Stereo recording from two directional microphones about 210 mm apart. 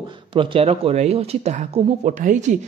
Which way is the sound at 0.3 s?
25° right (ahead or behind).